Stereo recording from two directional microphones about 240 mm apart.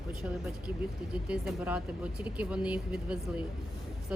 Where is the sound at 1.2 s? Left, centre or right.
Centre.